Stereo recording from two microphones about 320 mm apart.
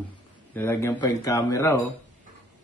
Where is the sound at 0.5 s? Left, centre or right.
Centre.